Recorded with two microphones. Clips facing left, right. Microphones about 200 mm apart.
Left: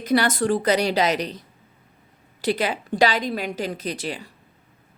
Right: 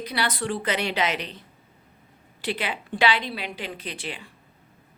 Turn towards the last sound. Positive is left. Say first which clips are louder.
# left 6 dB
turn(degrees=40)  # may be behind; listen again after turning